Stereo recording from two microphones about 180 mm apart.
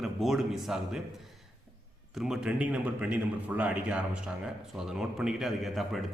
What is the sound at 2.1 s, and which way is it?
A man's voice, 5° right (ahead or behind).